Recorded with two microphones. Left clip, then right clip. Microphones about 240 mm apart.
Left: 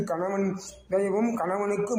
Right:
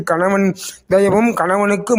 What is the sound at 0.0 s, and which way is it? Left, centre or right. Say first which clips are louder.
A man's voice: right 12 dB; right.